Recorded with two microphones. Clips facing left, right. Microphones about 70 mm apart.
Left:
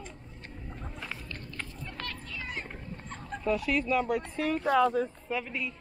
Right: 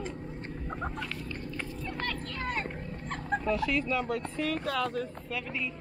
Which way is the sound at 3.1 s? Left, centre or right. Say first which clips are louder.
Right 10 dB; right.